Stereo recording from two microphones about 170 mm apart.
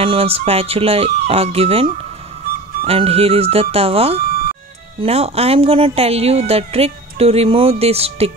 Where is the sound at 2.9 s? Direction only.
35° right (ahead or behind).